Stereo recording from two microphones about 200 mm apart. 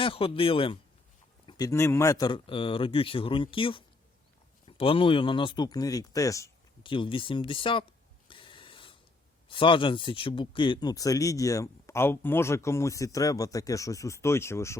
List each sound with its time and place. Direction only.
0.0 s speech: 25° left (ahead or behind)
8.3 s a sound: 25° left (ahead or behind)
9.5 s speech: 25° left (ahead or behind)